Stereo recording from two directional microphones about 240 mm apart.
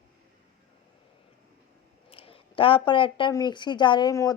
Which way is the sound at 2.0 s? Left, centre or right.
Left.